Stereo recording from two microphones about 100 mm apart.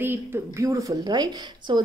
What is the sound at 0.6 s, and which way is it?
Speech, 35° right (ahead or behind).